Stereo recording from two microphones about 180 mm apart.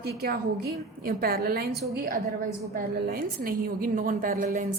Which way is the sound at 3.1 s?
55° right (ahead or behind).